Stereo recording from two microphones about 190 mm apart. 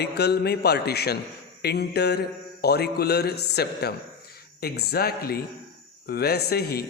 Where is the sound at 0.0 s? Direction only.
60° left (ahead or behind).